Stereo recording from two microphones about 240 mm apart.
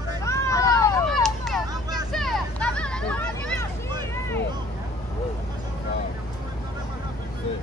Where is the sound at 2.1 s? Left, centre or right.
Centre.